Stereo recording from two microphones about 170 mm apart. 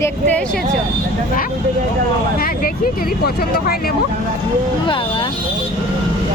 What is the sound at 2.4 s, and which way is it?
Speech, 60° left (ahead or behind).